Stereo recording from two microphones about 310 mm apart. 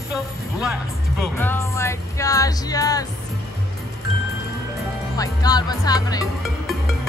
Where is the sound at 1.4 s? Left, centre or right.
Centre.